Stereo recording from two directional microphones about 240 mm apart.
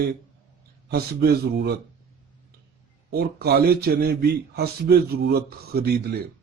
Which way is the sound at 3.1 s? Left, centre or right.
Right.